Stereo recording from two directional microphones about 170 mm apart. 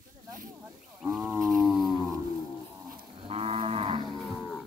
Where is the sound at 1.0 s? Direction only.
5° right (ahead or behind).